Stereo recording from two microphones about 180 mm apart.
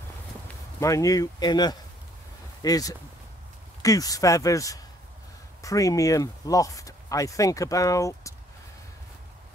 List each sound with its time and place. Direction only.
0.7 s speech: 20° left (ahead or behind)